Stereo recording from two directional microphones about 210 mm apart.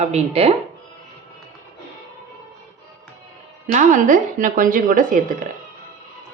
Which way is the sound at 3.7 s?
35° right (ahead or behind).